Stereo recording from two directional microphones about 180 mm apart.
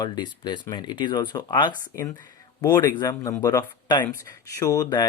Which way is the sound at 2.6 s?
15° left (ahead or behind).